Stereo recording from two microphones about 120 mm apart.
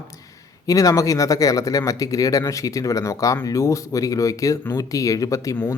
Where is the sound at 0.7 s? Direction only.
30° left (ahead or behind).